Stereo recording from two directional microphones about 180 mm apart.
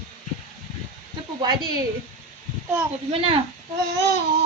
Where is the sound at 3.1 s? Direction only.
30° right (ahead or behind).